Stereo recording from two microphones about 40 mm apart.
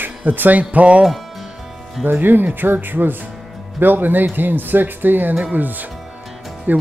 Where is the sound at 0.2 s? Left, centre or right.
Right.